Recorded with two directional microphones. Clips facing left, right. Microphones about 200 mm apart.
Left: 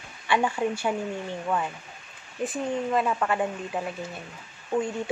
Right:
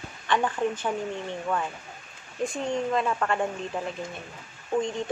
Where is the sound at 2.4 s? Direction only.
5° left (ahead or behind).